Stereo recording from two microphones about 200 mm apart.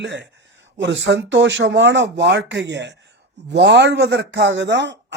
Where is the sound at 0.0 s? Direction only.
60° right (ahead or behind).